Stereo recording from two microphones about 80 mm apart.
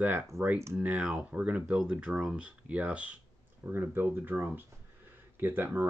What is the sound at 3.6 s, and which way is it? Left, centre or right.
Speech, right.